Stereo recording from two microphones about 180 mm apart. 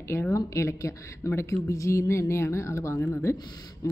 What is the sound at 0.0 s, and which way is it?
A woman's voice, 15° left (ahead or behind).